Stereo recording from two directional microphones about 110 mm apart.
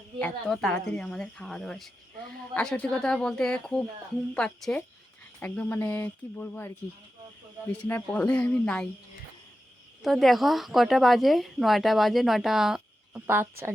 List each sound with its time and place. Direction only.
0.2 s a woman's voice: 5° left (ahead or behind)
10.0 s a woman's voice: centre (ahead or behind)
13.1 s speech: 20° right (ahead or behind)